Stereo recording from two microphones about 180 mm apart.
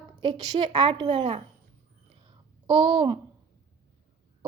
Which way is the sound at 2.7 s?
25° right (ahead or behind).